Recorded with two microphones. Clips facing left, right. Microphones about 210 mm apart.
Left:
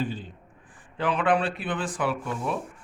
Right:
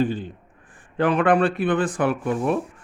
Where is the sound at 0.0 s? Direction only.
55° right (ahead or behind).